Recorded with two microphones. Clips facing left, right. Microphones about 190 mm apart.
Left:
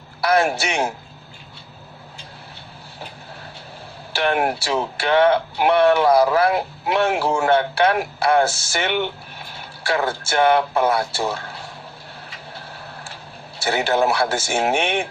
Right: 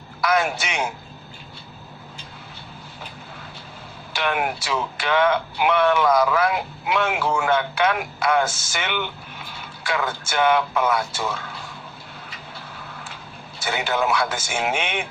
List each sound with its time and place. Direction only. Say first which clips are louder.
0.2 s speech: left 3 dB; 35° left (ahead or behind)
4.2 s speech: left 4 dB; 35° left (ahead or behind)
13.7 s speech: left 4 dB; 35° left (ahead or behind)